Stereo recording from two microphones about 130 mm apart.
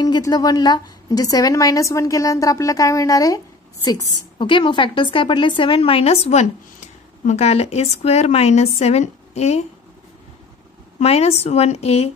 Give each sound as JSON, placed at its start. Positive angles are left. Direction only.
{"t": 0.0, "sound": "a woman's voice", "side_deg": 30}
{"t": 11.0, "sound": "speech", "side_deg": 55}